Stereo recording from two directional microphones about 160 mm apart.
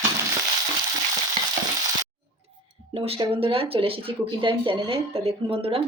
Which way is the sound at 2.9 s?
35° right (ahead or behind).